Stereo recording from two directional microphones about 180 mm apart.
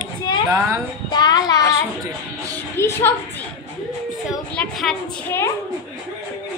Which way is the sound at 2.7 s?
15° left (ahead or behind).